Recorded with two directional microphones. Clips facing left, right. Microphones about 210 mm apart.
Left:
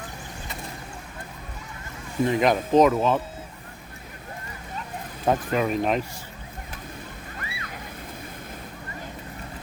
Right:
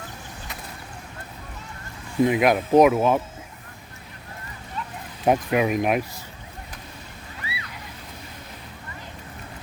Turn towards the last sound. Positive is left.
turn(degrees=50)  # may be behind; listen again after turning